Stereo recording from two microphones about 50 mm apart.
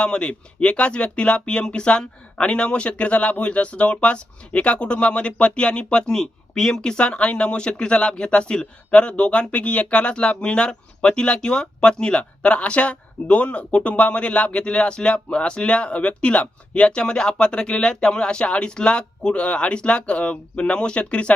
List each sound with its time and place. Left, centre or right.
0.0 s speech: left